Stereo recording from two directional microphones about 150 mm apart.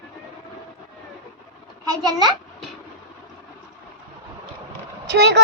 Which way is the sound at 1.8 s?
25° right (ahead or behind).